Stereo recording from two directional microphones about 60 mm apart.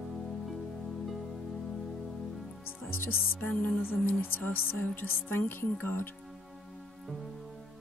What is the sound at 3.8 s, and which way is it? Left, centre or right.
Speech, left.